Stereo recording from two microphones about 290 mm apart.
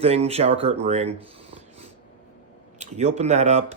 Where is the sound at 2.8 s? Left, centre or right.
Right.